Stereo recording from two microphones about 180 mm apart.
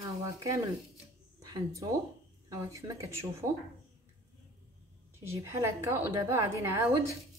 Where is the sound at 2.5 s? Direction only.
15° right (ahead or behind).